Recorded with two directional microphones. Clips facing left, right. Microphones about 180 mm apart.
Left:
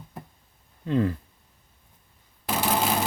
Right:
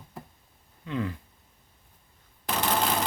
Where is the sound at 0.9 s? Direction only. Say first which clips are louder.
Left 7 dB; 40° left (ahead or behind).